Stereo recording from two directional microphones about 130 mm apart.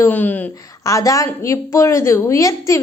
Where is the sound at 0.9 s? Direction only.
25° left (ahead or behind).